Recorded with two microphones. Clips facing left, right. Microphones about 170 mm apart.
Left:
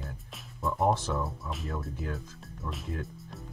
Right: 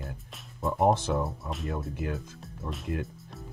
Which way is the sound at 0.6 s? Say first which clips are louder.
Right 3 dB; 20° right (ahead or behind).